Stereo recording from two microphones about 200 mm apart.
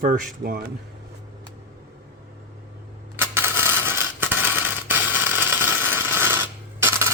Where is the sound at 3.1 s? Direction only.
10° right (ahead or behind).